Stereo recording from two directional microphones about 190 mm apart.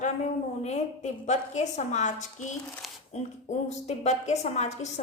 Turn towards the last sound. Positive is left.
turn(degrees=35)  # may be behind; listen again after turning